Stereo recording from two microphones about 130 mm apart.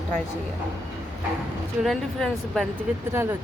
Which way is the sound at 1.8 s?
Centre (ahead or behind).